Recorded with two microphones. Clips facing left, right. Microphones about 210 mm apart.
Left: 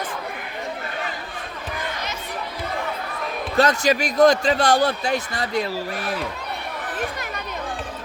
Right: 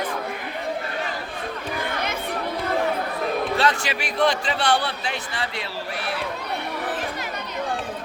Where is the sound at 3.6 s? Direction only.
45° left (ahead or behind).